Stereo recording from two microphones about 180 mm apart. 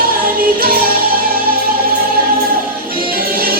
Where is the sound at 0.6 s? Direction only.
55° right (ahead or behind).